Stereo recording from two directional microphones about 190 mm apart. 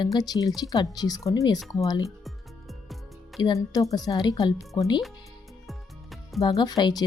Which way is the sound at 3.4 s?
20° left (ahead or behind).